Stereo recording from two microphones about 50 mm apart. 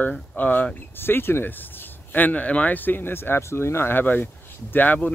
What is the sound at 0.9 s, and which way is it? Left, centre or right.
Speech, left.